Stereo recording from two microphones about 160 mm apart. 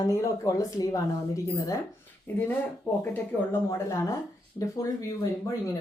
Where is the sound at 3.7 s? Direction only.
20° left (ahead or behind).